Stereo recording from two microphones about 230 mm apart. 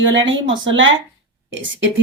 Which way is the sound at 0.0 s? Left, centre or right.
Right.